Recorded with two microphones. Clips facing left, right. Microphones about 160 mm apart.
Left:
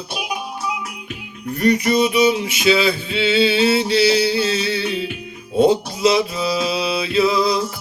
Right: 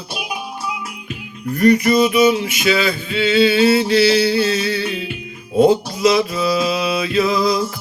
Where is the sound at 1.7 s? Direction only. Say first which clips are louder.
Right 3 dB; 25° left (ahead or behind).